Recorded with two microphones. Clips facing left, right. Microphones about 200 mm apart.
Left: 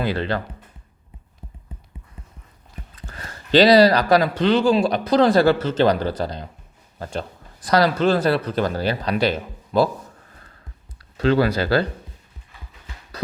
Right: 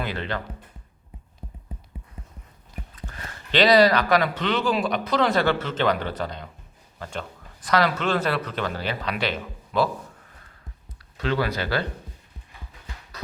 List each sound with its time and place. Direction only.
0.0 s speech: 35° left (ahead or behind)
2.9 s speech: 35° left (ahead or behind)
10.9 s speech: 35° left (ahead or behind)